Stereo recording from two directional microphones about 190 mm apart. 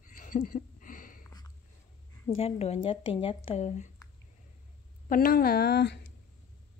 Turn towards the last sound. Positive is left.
turn(degrees=60)  # may be behind; listen again after turning